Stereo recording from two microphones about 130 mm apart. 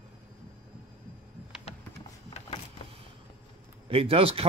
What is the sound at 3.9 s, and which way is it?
Speech, 45° right (ahead or behind).